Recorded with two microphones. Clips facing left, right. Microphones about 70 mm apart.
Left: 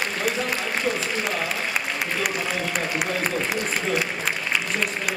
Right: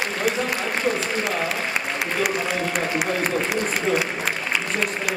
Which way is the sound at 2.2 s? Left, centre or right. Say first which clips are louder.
Right 5 dB; centre.